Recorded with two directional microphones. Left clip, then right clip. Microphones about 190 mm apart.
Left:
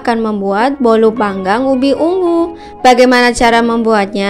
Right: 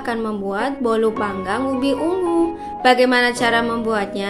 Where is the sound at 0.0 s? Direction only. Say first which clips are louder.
Left 9 dB; 40° left (ahead or behind).